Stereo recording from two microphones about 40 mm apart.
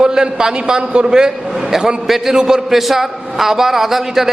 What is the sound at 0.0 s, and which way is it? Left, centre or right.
A man's voice, centre.